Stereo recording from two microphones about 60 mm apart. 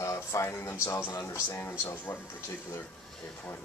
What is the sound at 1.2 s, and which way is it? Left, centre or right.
Speech, left.